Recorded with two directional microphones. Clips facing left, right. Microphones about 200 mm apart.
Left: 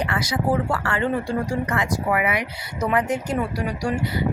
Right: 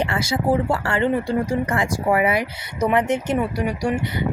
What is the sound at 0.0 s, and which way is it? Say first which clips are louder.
Speech: right 2 dB; 25° right (ahead or behind).